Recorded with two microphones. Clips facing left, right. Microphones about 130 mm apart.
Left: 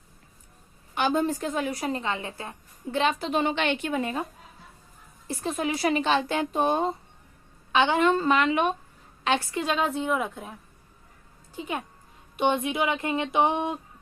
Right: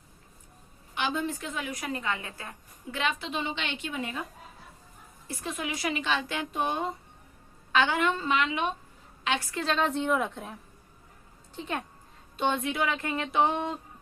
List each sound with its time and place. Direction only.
0.9 s a woman's voice: 45° left (ahead or behind)
5.3 s a woman's voice: 30° left (ahead or behind)
7.7 s a woman's voice: 25° left (ahead or behind); by 8.7 s 50° left (ahead or behind)
9.5 s a woman's voice: 15° left (ahead or behind)
9.8 s a woman's voice: 5° left (ahead or behind)